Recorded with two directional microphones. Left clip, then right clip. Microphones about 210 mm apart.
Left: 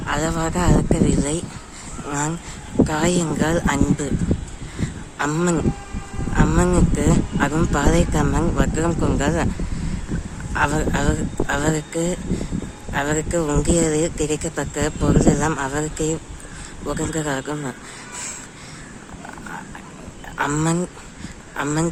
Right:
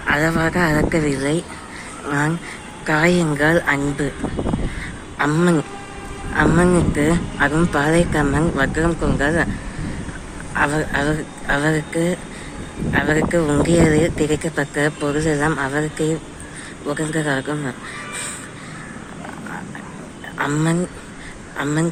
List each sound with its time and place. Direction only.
0.0 s speech: 10° left (ahead or behind)
4.8 s a sound: 10° left (ahead or behind)
6.3 s speech: 10° left (ahead or behind)
10.5 s speech: 15° left (ahead or behind)
20.4 s speech: 20° left (ahead or behind)